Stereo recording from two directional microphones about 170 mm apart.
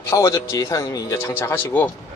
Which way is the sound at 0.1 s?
15° left (ahead or behind).